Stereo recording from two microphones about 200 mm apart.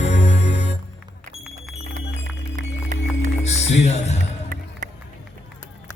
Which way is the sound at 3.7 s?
35° left (ahead or behind).